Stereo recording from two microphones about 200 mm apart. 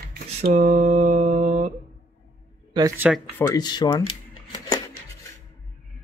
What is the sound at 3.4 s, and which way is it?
Speech, 20° left (ahead or behind).